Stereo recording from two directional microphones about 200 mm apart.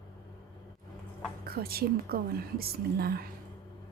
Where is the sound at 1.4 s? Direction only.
50° right (ahead or behind).